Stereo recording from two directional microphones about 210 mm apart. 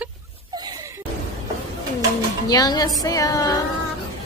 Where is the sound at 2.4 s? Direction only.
20° left (ahead or behind).